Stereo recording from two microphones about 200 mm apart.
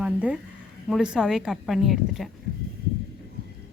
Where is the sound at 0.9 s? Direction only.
5° right (ahead or behind).